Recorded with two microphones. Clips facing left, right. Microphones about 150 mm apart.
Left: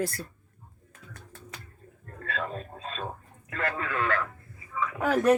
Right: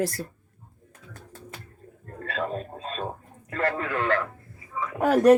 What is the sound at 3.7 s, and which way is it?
Speech, 35° right (ahead or behind).